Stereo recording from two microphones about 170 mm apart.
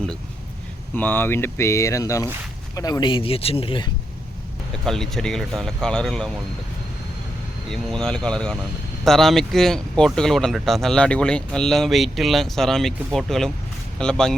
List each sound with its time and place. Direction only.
0.9 s speech: 10° left (ahead or behind); by 3.8 s 30° left (ahead or behind)
4.9 s speech: centre (ahead or behind)
7.7 s speech: 5° left (ahead or behind)